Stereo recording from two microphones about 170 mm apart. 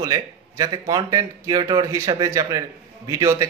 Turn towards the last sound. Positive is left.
turn(degrees=-15)  # may be behind; listen again after turning